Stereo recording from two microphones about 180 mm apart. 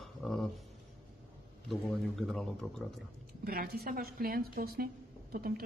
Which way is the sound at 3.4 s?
55° right (ahead or behind).